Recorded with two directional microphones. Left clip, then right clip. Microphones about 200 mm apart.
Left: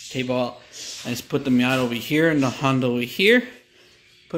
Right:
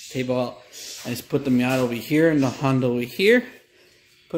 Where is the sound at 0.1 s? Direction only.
Centre (ahead or behind).